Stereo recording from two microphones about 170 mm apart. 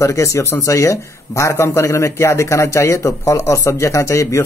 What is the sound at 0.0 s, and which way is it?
Speech, 15° left (ahead or behind).